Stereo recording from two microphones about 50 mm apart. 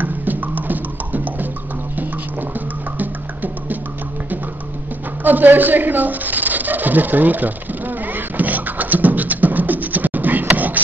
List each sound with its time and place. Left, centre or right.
0.0 s music: right
5.2 s speech: right
8.1 s beatboxing: right